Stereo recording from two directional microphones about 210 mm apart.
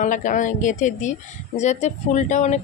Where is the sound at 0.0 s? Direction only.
35° left (ahead or behind).